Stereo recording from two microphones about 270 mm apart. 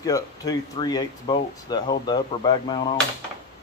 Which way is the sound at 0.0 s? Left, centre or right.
Centre.